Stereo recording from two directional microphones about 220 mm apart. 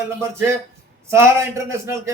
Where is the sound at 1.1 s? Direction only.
10° right (ahead or behind).